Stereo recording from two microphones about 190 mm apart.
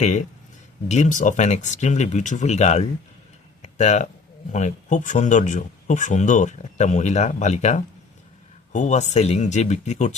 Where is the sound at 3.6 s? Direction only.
40° left (ahead or behind).